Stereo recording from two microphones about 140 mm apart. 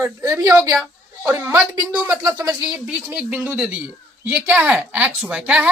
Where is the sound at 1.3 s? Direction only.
20° right (ahead or behind).